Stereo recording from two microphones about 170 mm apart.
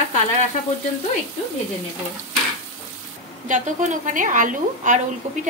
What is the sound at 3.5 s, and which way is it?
A woman's voice, 50° right (ahead or behind).